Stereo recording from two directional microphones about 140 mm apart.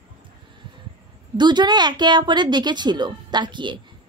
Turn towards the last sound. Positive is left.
turn(degrees=-35)  # may be behind; listen again after turning